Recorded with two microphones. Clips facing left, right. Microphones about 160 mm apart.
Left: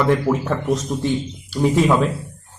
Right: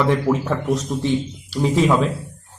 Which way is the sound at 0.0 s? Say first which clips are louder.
Left 1 dB; centre (ahead or behind).